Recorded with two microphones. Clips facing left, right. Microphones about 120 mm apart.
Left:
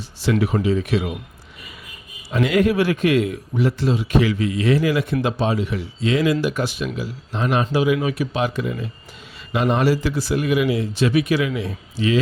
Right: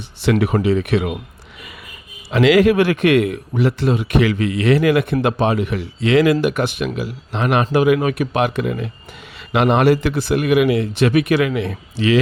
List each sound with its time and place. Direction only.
0.2 s a man's voice: 65° right (ahead or behind)
2.3 s a man's voice: 90° right; by 12.2 s 70° right (ahead or behind)